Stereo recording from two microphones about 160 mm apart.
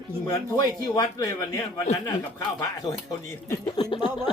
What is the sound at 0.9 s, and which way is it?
Speech, 20° left (ahead or behind).